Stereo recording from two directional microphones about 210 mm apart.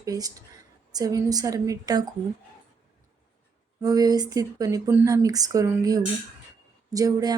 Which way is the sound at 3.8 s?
15° right (ahead or behind).